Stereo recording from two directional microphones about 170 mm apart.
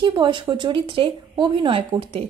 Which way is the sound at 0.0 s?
30° right (ahead or behind).